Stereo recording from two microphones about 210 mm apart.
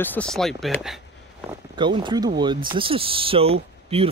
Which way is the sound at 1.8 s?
20° right (ahead or behind).